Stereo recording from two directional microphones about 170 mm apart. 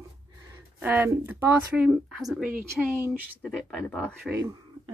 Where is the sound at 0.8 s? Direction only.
10° right (ahead or behind).